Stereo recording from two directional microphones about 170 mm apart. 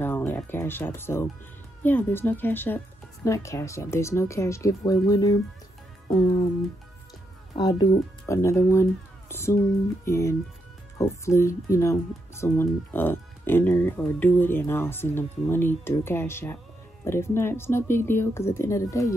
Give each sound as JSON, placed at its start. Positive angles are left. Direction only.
{"t": 0.0, "sound": "speech", "side_deg": 10}
{"t": 6.0, "sound": "music", "side_deg": 35}
{"t": 7.5, "sound": "speech", "side_deg": 25}